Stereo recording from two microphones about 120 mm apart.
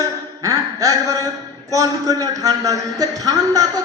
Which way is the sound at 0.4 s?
30° right (ahead or behind).